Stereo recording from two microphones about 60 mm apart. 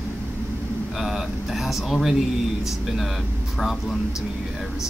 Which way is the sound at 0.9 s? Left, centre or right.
Centre.